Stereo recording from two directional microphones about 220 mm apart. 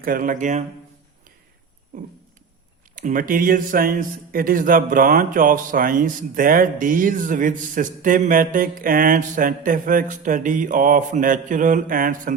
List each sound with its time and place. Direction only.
0.0 s a man's voice: 40° right (ahead or behind)
2.9 s a man's voice: 35° right (ahead or behind)